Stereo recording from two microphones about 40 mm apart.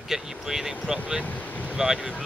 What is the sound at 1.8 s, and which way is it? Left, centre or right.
Speech, centre.